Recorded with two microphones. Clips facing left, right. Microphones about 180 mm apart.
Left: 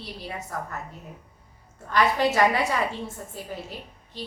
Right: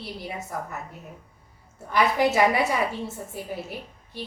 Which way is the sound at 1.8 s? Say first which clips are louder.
Right 1 dB; 10° right (ahead or behind).